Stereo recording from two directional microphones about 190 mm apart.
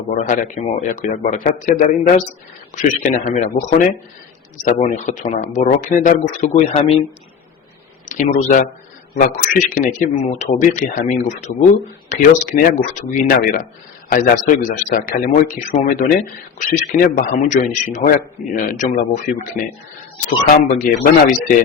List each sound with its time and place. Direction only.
0.1 s speech: 40° left (ahead or behind)
8.1 s speech: 40° left (ahead or behind)
20.7 s speech: 50° left (ahead or behind)